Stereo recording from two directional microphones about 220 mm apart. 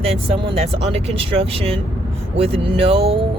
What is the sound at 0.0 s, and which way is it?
Speech, 25° right (ahead or behind).